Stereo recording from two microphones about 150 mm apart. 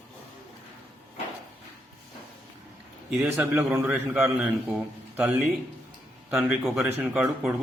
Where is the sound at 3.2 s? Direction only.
15° right (ahead or behind).